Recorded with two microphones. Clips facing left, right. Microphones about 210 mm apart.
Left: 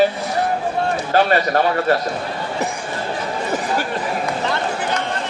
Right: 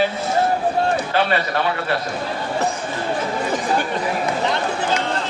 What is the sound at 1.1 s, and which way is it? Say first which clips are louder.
Speech: left 4 dB; 45° left (ahead or behind).